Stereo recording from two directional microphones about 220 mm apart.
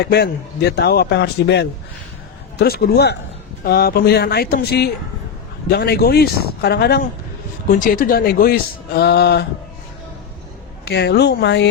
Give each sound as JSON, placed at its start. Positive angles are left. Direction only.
{"t": 0.0, "sound": "speech", "side_deg": 45}
{"t": 10.8, "sound": "speech", "side_deg": 50}